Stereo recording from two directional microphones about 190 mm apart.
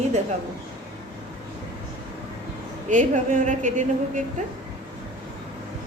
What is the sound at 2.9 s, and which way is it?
A woman's voice, 40° right (ahead or behind).